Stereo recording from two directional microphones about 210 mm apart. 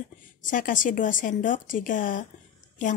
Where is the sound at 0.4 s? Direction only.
40° left (ahead or behind).